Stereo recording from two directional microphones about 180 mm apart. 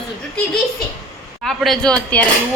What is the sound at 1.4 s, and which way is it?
Speech, centre (ahead or behind).